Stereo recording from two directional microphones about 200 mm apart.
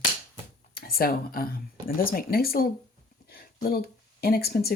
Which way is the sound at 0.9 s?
50° left (ahead or behind).